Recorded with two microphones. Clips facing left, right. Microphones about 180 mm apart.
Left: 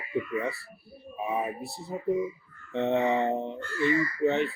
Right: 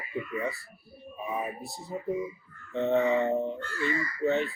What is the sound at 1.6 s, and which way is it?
A man's voice, 65° left (ahead or behind).